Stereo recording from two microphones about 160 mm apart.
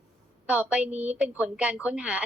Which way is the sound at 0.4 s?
10° right (ahead or behind).